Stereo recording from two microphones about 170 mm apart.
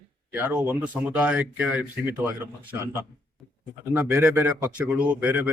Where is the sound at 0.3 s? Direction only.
10° right (ahead or behind).